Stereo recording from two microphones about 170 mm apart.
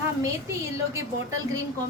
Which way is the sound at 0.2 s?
20° right (ahead or behind).